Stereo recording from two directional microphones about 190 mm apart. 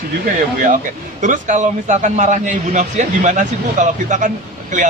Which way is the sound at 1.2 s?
40° right (ahead or behind).